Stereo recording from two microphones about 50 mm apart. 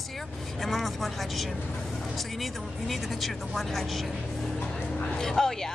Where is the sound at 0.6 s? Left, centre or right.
Centre.